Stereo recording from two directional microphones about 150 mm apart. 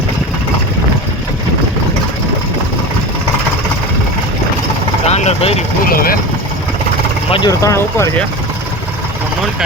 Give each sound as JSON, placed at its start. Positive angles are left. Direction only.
{"t": 5.0, "sound": "vehicle", "side_deg": 45}
{"t": 5.8, "sound": "speech", "side_deg": 75}
{"t": 7.3, "sound": "speech", "side_deg": 35}
{"t": 7.6, "sound": "speech", "side_deg": 20}